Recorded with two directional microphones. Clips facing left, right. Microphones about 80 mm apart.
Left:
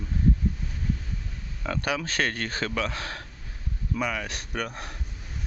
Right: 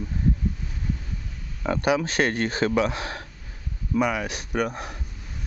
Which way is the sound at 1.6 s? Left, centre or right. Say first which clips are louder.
Right 6 dB; right.